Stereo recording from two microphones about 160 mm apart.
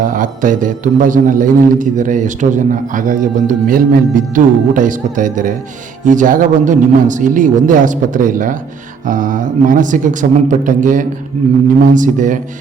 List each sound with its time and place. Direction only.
0.0 s a man's voice: 55° right (ahead or behind)